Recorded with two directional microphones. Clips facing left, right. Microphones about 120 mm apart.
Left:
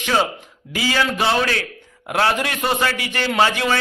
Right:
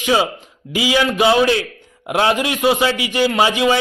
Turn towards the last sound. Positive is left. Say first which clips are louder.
# right 3 dB
turn(degrees=-15)  # may be behind; listen again after turning